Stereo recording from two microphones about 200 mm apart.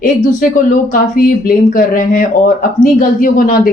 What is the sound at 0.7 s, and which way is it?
A woman's voice, 45° left (ahead or behind).